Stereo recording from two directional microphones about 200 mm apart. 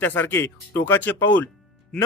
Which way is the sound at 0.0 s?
10° left (ahead or behind).